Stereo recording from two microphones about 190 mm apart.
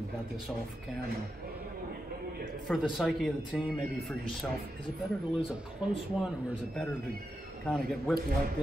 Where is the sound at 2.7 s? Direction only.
Centre (ahead or behind).